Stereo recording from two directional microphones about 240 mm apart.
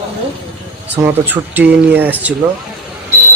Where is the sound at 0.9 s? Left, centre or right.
Centre.